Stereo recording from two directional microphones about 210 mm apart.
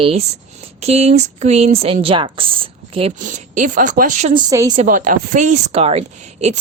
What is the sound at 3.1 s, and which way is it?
A woman's voice, 40° right (ahead or behind).